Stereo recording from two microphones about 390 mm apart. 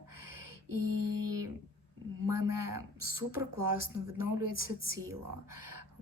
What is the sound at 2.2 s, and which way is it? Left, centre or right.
Speech, right.